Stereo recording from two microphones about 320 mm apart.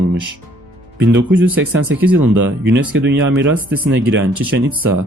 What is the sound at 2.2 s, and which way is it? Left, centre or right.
Speech, right.